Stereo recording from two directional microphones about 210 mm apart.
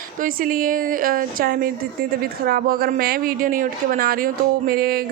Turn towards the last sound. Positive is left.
turn(degrees=-45)  # may be behind; listen again after turning